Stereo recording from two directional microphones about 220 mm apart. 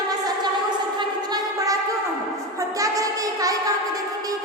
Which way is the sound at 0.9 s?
15° right (ahead or behind).